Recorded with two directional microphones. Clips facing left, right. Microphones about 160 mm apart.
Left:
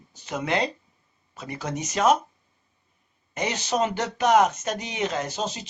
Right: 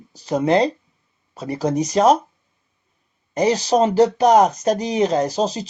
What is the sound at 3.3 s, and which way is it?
Speech, 35° right (ahead or behind).